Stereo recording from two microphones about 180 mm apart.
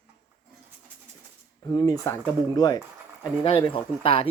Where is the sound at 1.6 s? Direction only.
20° left (ahead or behind).